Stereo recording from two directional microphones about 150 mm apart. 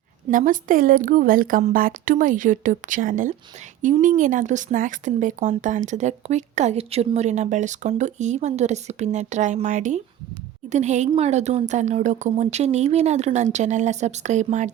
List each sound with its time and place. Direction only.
0.3 s a woman's voice: 60° right (ahead or behind)